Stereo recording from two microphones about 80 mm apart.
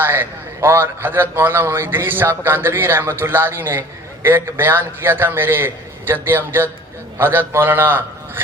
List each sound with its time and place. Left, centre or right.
0.0 s a man's voice: right